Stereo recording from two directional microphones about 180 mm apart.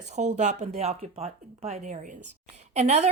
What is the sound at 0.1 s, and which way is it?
A woman's voice, 40° right (ahead or behind).